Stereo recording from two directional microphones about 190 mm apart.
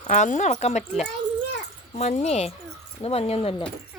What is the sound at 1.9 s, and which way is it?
Speech, 35° left (ahead or behind).